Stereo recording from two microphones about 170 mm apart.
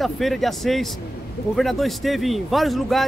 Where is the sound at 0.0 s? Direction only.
Centre (ahead or behind).